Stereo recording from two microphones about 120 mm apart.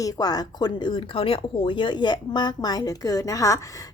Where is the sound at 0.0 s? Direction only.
30° left (ahead or behind).